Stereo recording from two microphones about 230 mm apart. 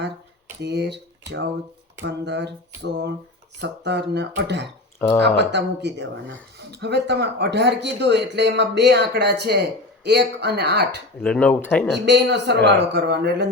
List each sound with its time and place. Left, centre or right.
0.6 s speech: right
4.9 s speech: centre
5.4 s speech: right
11.2 s speech: centre
11.9 s speech: right